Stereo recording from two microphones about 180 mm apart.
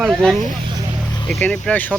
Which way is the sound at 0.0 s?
Centre (ahead or behind).